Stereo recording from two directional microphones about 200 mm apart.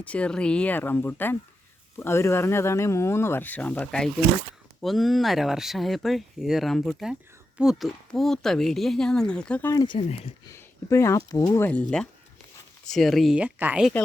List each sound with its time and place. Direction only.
0.0 s speech: 5° left (ahead or behind)
9.8 s speech: 30° left (ahead or behind)
10.4 s speech: 15° left (ahead or behind); by 13.9 s 5° right (ahead or behind)